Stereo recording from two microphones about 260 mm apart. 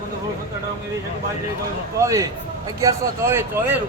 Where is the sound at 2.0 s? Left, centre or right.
Centre.